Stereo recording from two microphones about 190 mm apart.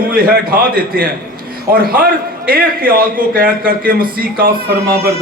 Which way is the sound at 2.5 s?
50° right (ahead or behind).